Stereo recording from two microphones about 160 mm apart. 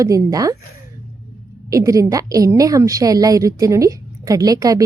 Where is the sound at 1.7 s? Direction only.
20° right (ahead or behind).